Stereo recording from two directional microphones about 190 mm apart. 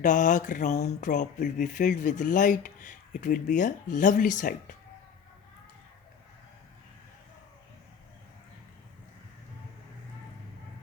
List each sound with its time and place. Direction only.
0.0 s speech: 40° left (ahead or behind)